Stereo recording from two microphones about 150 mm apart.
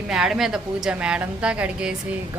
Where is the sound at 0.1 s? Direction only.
5° right (ahead or behind).